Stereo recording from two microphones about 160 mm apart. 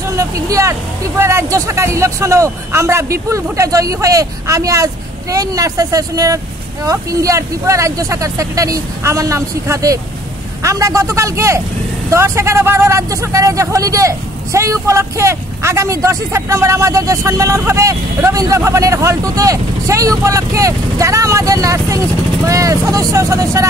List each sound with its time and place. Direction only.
0.0 s a man's voice: 20° right (ahead or behind)